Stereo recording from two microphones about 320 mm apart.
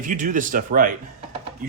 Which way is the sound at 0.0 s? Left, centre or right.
Right.